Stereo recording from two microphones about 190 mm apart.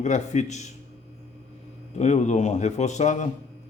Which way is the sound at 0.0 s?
35° left (ahead or behind).